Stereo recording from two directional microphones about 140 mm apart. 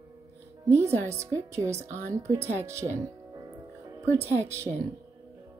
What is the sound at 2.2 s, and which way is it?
Music, 20° right (ahead or behind).